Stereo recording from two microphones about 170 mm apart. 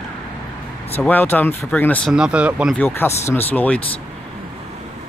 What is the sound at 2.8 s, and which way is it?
Speech, 15° left (ahead or behind).